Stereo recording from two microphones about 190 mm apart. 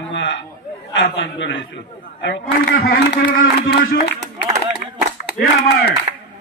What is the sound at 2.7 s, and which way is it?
Speech, 50° left (ahead or behind).